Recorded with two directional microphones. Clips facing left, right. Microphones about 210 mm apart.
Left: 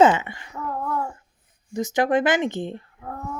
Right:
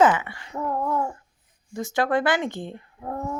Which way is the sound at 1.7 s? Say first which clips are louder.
Left 3 dB; 20° left (ahead or behind).